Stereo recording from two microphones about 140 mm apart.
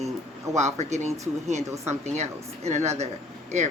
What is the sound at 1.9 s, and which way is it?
A man's voice, 55° right (ahead or behind).